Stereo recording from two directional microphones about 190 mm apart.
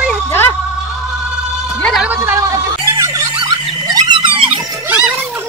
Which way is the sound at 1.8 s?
Centre (ahead or behind).